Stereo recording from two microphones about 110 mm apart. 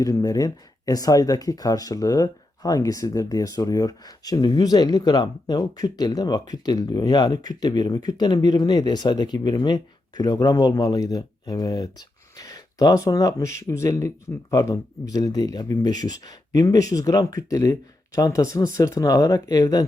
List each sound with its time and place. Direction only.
0.0 s speech: 35° left (ahead or behind)